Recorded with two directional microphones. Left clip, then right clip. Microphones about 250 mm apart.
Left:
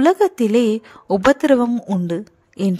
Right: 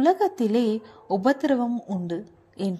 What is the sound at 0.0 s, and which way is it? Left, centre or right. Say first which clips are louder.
Speech: left 6 dB; left.